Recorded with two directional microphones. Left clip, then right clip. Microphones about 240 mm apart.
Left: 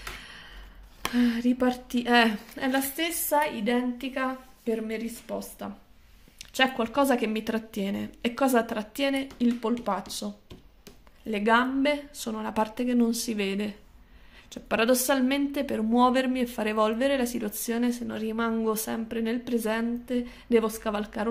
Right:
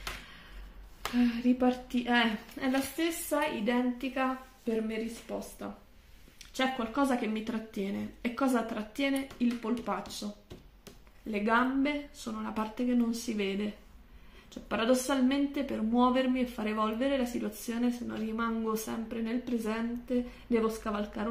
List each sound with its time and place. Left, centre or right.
1.6 s a woman's voice: left
11.2 s a woman's voice: left